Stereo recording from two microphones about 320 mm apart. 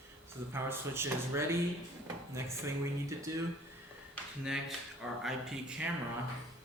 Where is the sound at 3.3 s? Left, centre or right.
Centre.